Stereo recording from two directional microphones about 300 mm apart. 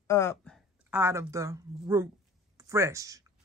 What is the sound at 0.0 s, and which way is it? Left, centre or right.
Speech, centre.